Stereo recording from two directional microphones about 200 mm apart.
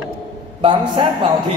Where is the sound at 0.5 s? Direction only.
25° right (ahead or behind).